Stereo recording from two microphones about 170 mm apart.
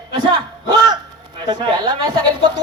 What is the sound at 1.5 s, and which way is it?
Speech, 25° right (ahead or behind).